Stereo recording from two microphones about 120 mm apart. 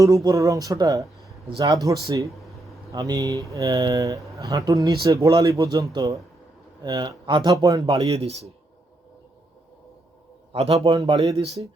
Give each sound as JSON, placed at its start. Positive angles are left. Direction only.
{"t": 0.0, "sound": "a man's voice", "side_deg": -25}
{"t": 7.5, "sound": "a man's voice", "side_deg": -30}
{"t": 7.9, "sound": "speech", "side_deg": -55}
{"t": 10.5, "sound": "a man's voice", "side_deg": -60}